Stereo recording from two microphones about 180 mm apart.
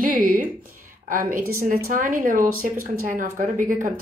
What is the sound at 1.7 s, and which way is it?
Speech, 50° right (ahead or behind).